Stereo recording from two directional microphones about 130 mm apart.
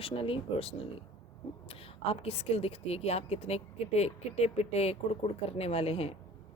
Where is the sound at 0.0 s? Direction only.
45° left (ahead or behind).